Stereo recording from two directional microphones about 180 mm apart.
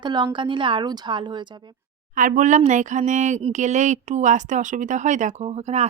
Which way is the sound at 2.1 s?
45° right (ahead or behind).